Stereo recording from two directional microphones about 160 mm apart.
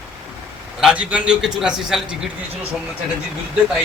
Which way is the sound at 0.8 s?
5° right (ahead or behind).